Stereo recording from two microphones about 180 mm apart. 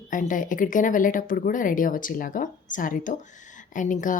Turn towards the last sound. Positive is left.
turn(degrees=45)  # may be behind; listen again after turning